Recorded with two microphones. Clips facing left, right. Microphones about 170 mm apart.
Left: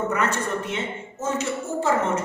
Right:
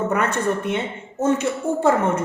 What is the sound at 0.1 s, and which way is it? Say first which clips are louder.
A woman's voice: right 4 dB; 60° right (ahead or behind).